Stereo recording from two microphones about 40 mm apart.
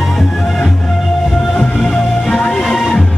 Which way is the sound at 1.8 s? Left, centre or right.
Centre.